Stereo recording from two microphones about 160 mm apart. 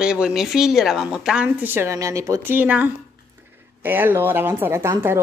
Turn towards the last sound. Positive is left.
turn(degrees=-15)  # may be behind; listen again after turning